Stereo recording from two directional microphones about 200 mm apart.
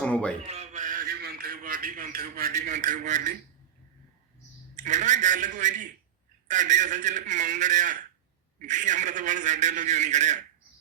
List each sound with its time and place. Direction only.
0.0 s a sound: 5° left (ahead or behind)
0.4 s a man's voice: 35° right (ahead or behind)
2.5 s a man's voice: 35° right (ahead or behind)
4.8 s a man's voice: 35° right (ahead or behind)